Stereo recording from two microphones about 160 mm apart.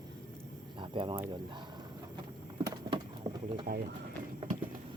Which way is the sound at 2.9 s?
30° right (ahead or behind).